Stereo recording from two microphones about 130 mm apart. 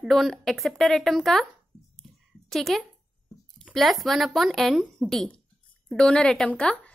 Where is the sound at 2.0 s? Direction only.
Centre (ahead or behind).